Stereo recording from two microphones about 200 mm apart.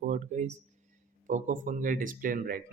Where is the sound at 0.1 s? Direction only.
35° right (ahead or behind).